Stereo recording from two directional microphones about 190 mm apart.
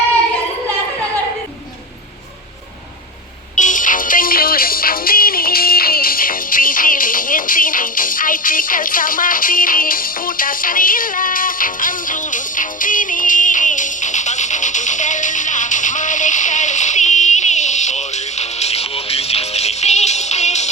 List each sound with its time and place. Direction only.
3.5 s music: 40° left (ahead or behind)